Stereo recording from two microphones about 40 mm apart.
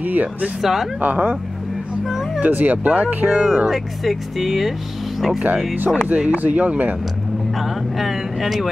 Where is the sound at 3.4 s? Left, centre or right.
Centre.